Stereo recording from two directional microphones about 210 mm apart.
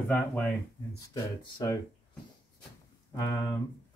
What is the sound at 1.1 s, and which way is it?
Speech, 15° left (ahead or behind).